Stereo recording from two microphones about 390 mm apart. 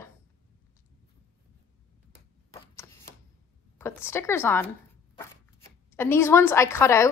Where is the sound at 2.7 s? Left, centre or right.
Centre.